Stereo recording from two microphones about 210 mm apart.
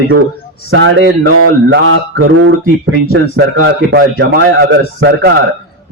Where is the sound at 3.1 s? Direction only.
55° right (ahead or behind).